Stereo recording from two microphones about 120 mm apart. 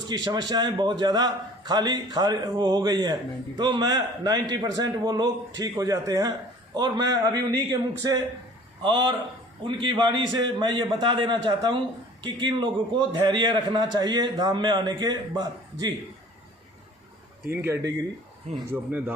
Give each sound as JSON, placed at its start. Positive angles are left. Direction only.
{"t": 0.1, "sound": "a man's voice", "side_deg": -35}
{"t": 17.5, "sound": "speech", "side_deg": -20}